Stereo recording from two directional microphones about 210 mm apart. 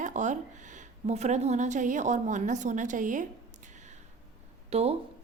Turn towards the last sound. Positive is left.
turn(degrees=-30)  # may be behind; listen again after turning